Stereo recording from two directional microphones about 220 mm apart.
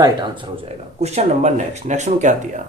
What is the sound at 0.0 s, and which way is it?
Speech, 20° right (ahead or behind).